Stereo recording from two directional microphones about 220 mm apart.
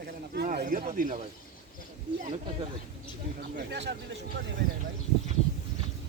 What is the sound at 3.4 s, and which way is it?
Speech, 50° right (ahead or behind).